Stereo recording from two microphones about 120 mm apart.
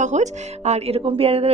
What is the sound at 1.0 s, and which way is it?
Speech, 50° right (ahead or behind).